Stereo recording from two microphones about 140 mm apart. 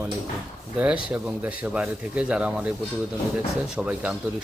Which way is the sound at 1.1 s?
10° right (ahead or behind).